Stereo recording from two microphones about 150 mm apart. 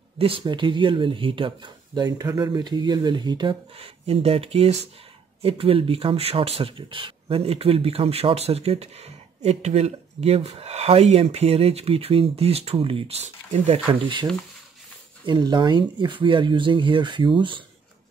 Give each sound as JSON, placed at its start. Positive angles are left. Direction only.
{"t": 0.2, "sound": "speech", "side_deg": -35}
{"t": 3.7, "sound": "speech", "side_deg": -40}
{"t": 13.9, "sound": "speech", "side_deg": -35}
{"t": 15.2, "sound": "speech", "side_deg": -30}